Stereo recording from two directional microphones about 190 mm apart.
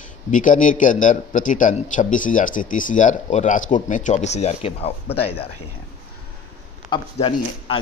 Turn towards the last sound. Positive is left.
turn(degrees=30)  # may be behind; listen again after turning